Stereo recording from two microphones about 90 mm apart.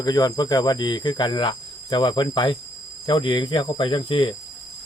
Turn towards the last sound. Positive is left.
turn(degrees=65)  # may be behind; listen again after turning